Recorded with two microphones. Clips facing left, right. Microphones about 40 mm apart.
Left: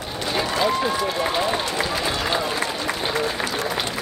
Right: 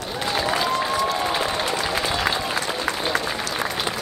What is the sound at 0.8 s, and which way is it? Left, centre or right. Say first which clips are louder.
Run: even; centre.